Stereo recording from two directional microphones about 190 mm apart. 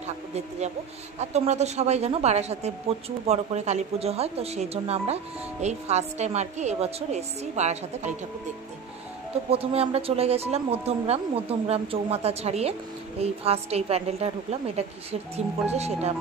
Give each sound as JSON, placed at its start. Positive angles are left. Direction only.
{"t": 0.0, "sound": "speech", "side_deg": -35}
{"t": 9.5, "sound": "speech", "side_deg": -30}